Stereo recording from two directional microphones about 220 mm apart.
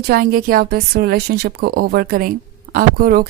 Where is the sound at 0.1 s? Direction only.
40° right (ahead or behind).